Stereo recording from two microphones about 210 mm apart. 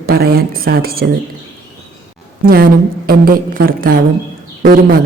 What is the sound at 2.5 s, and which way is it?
A woman's voice, 45° right (ahead or behind).